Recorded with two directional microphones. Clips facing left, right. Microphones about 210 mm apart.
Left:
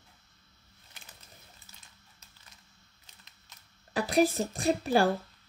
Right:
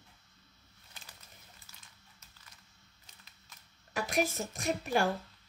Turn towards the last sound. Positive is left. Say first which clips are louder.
# left 5 dB
turn(degrees=35)  # may be behind; listen again after turning